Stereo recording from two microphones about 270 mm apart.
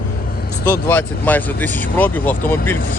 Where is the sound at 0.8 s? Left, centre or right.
Centre.